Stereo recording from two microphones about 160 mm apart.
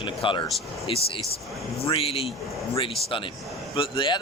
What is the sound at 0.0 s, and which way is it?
Vehicle, 30° left (ahead or behind).